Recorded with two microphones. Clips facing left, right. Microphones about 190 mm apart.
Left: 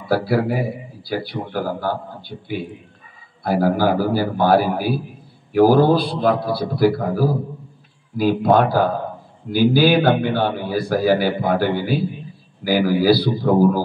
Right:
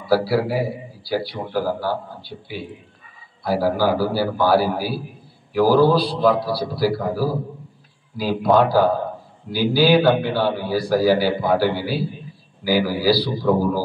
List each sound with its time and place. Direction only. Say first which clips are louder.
0.0 s a man's voice: even; 55° left (ahead or behind)